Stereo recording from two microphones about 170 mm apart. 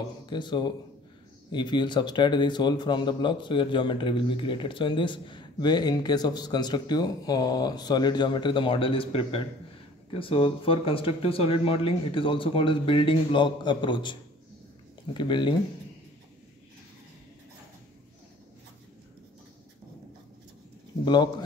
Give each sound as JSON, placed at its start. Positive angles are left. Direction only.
{"t": 0.3, "sound": "a man's voice", "side_deg": 25}
{"t": 15.1, "sound": "a man's voice", "side_deg": 30}
{"t": 21.0, "sound": "a man's voice", "side_deg": 25}